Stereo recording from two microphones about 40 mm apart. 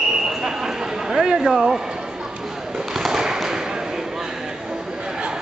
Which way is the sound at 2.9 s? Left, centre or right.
Centre.